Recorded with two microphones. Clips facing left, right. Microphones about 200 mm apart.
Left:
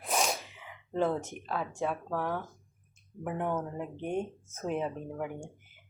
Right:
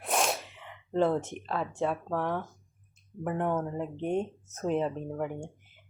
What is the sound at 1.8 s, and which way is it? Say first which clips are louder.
Speech: right 3 dB; centre (ahead or behind).